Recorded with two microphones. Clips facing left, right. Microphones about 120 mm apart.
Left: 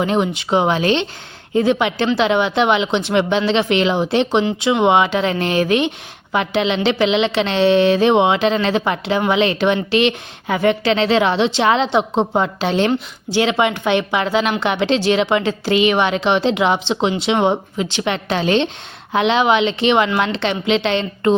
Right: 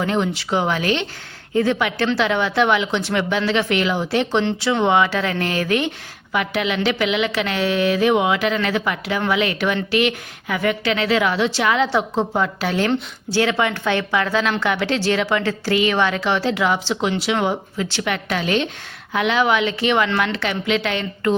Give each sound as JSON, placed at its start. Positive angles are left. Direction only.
{"t": 0.0, "sound": "a woman's voice", "side_deg": 20}